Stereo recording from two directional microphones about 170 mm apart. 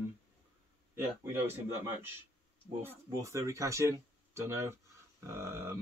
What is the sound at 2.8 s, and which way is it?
Speech, 20° right (ahead or behind).